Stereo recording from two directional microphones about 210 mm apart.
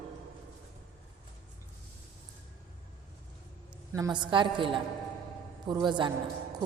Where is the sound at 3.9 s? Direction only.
20° right (ahead or behind).